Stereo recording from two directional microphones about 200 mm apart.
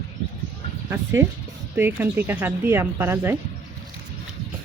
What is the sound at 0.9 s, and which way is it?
Speech, 15° right (ahead or behind).